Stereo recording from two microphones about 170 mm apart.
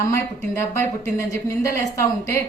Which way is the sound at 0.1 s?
15° left (ahead or behind).